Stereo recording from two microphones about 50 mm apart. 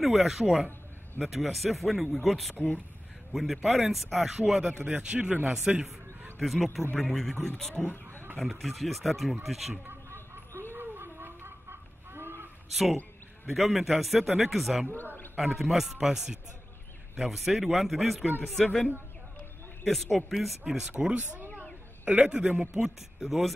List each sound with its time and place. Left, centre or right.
0.0 s speech: centre
2.5 s speech: left
3.3 s speech: centre
4.7 s a man's voice: right
6.3 s speech: centre
8.1 s a sound: right
8.4 s speech: centre
9.8 s a sound: right
10.7 s chicken: right
13.5 s speech: centre
18.5 s speech: centre
19.9 s speech: centre
22.0 s a man's voice: right
22.8 s speech: centre